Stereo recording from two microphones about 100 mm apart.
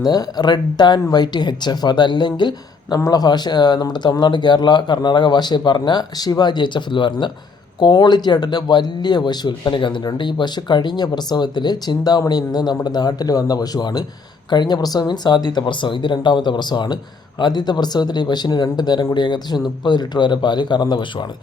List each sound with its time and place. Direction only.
0.0 s speech: 40° left (ahead or behind)